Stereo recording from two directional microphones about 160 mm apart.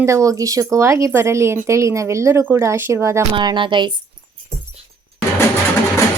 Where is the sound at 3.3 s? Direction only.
30° right (ahead or behind).